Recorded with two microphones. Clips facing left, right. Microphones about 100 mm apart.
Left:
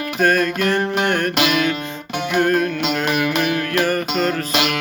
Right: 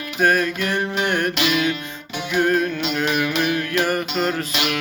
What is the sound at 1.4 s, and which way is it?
Music, 55° left (ahead or behind).